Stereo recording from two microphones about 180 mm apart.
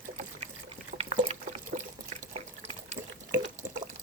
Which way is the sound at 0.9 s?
40° right (ahead or behind).